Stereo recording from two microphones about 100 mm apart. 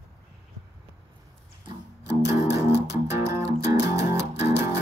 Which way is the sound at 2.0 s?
30° right (ahead or behind).